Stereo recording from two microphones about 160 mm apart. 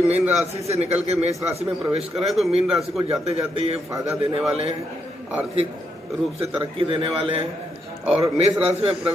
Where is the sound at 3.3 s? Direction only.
40° right (ahead or behind).